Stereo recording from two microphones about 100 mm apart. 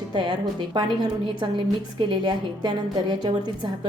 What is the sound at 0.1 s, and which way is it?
A woman's voice, 50° right (ahead or behind).